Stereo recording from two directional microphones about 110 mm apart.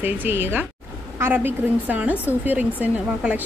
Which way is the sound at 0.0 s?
20° right (ahead or behind).